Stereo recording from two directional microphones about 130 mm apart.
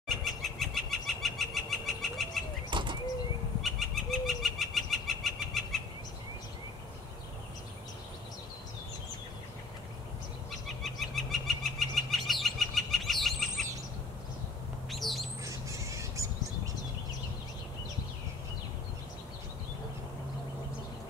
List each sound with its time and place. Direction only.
0.2 s bird: centre (ahead or behind)
2.7 s bird flight: 40° right (ahead or behind)
3.6 s bird: centre (ahead or behind)
10.8 s bird: centre (ahead or behind)
14.9 s squawk: centre (ahead or behind)
15.4 s bird: 25° right (ahead or behind)